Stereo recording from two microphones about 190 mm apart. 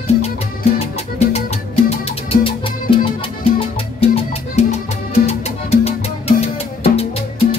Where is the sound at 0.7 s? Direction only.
35° left (ahead or behind).